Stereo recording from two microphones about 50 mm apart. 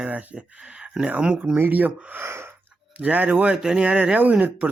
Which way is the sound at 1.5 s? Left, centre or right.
Right.